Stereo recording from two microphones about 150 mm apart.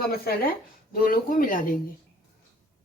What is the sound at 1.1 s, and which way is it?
Speech, 65° left (ahead or behind).